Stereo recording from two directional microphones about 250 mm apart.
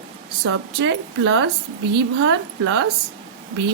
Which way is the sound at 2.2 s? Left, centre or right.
Right.